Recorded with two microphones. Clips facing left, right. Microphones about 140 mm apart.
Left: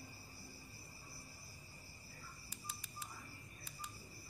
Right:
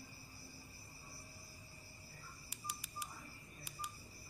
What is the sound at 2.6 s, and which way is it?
Telephone dialing, 10° right (ahead or behind).